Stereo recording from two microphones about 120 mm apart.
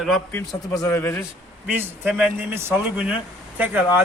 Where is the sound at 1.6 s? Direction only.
15° right (ahead or behind).